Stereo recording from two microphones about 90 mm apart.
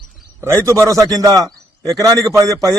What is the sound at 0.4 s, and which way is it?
A man's voice, 35° right (ahead or behind).